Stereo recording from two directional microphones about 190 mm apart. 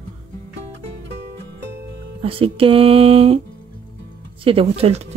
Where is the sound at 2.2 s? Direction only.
30° right (ahead or behind).